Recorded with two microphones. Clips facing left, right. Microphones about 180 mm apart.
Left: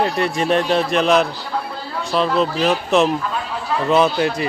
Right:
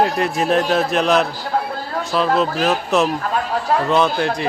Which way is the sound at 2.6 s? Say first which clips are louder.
Left 1 dB; centre (ahead or behind).